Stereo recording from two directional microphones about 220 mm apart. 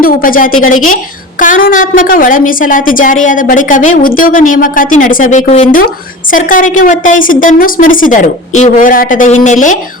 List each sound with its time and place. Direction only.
0.0 s a woman's voice: 40° left (ahead or behind)